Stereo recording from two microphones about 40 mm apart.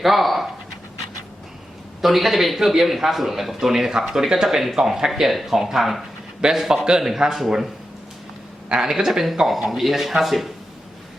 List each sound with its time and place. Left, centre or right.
0.0 s speech: centre
2.0 s speech: centre
8.7 s speech: centre